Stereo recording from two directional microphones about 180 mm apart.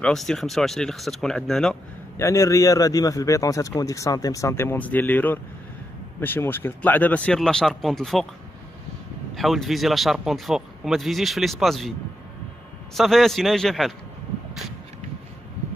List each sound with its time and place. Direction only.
0.0 s speech: 5° left (ahead or behind)
2.1 s a man's voice: 15° left (ahead or behind)
9.3 s speech: centre (ahead or behind)
12.9 s speech: centre (ahead or behind)